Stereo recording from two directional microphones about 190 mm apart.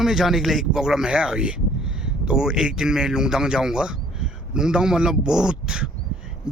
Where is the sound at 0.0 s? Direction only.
Centre (ahead or behind).